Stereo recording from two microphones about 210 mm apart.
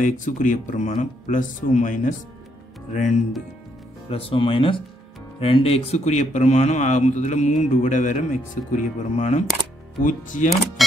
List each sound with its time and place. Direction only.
0.0 s a man's voice: 35° left (ahead or behind)
4.1 s a man's voice: 25° left (ahead or behind)